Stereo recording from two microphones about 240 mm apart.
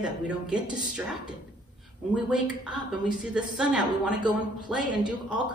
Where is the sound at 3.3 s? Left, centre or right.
Centre.